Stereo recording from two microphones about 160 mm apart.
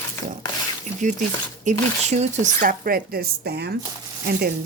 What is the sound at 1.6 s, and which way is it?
Speech, 50° right (ahead or behind).